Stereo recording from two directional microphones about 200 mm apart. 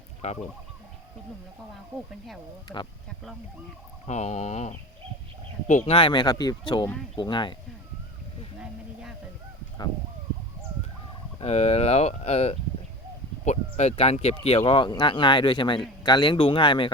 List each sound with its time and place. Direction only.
0.2 s speech: 35° left (ahead or behind)
2.7 s speech: 5° left (ahead or behind)
4.0 s speech: 35° left (ahead or behind)
8.6 s speech: 5° right (ahead or behind)
11.3 s speech: 30° left (ahead or behind)